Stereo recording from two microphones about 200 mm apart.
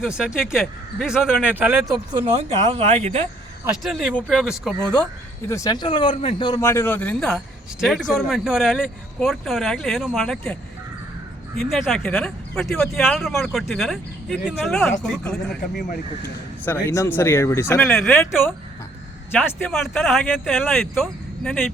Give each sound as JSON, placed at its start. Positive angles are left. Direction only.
{"t": 0.0, "sound": "a man's voice", "side_deg": -5}
{"t": 2.5, "sound": "speech", "side_deg": -30}
{"t": 3.8, "sound": "a man's voice", "side_deg": 5}
{"t": 5.5, "sound": "a man's voice", "side_deg": 15}
{"t": 16.6, "sound": "speech", "side_deg": 10}
{"t": 17.9, "sound": "a man's voice", "side_deg": 0}